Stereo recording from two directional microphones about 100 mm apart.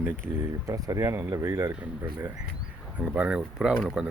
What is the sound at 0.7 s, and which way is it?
Speech, 35° right (ahead or behind).